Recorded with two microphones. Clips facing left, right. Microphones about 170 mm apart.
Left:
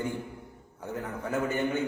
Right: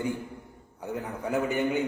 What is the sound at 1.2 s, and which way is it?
Speech, 15° right (ahead or behind).